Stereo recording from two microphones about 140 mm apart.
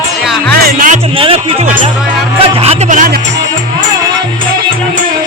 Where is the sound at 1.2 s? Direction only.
45° right (ahead or behind); by 3.2 s 80° right.